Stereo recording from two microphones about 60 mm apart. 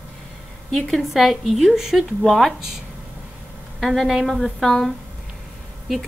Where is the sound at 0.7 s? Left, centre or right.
Centre.